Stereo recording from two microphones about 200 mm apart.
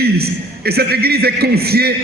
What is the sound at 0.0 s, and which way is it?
A man's voice, 50° right (ahead or behind).